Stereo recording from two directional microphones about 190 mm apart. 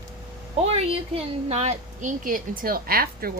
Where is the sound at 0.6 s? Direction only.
35° right (ahead or behind).